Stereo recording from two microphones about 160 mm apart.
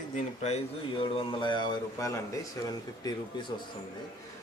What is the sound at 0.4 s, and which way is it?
Speech, 35° left (ahead or behind).